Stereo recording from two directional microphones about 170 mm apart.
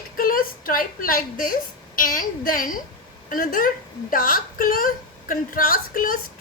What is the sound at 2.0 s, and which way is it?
A woman's voice, 55° left (ahead or behind).